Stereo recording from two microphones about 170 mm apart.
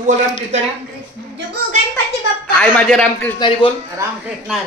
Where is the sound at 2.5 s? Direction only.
5° left (ahead or behind).